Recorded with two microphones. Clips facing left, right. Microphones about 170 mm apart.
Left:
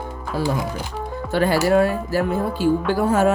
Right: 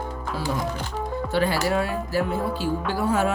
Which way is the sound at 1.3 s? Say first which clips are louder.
Left 6 dB; 50° left (ahead or behind).